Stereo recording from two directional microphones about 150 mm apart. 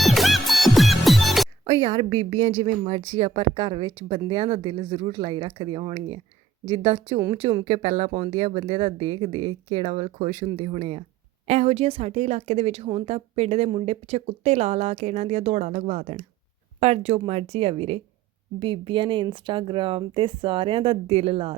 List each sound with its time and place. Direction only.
0.0 s music: centre (ahead or behind)
1.6 s a woman's voice: 40° right (ahead or behind)